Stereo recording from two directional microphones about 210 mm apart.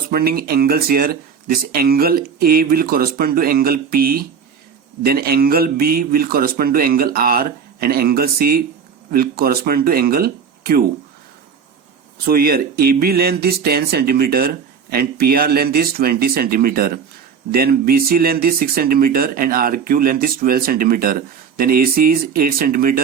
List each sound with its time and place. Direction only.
0.1 s speech: 45° right (ahead or behind)
12.2 s speech: 45° right (ahead or behind)